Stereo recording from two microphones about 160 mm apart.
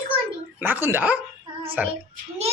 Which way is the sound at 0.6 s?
10° right (ahead or behind).